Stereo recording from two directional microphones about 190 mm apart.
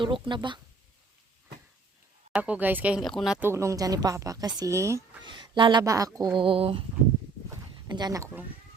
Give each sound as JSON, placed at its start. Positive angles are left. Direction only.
{"t": 0.0, "sound": "speech", "side_deg": -25}
{"t": 2.3, "sound": "speech", "side_deg": -10}
{"t": 3.4, "sound": "speech", "side_deg": -15}
{"t": 7.9, "sound": "speech", "side_deg": -20}